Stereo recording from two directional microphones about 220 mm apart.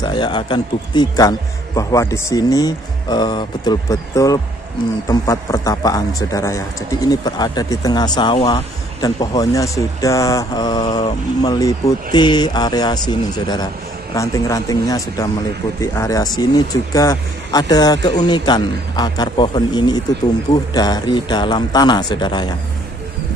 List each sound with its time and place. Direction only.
0.0 s speech: 20° left (ahead or behind)